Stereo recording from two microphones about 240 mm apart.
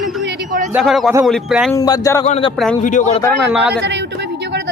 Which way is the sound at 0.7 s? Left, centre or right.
Centre.